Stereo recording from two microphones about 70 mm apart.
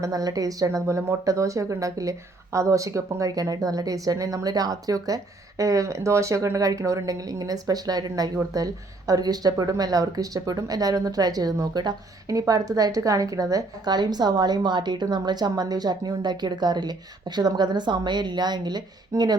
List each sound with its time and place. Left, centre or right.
0.0 s speech: right
0.9 s speech: right